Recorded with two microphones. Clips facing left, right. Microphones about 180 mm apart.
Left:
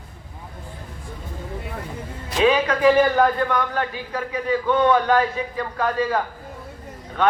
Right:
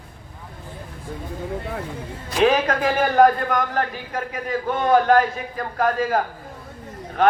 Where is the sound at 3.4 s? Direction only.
45° right (ahead or behind).